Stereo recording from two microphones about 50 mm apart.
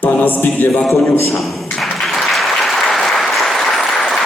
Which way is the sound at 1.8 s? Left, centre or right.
Centre.